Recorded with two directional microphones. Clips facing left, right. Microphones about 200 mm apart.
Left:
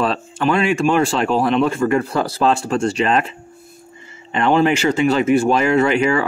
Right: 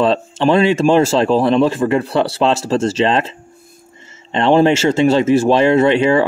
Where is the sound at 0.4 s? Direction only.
30° right (ahead or behind).